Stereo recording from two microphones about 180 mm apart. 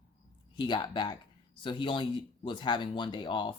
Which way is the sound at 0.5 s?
25° left (ahead or behind).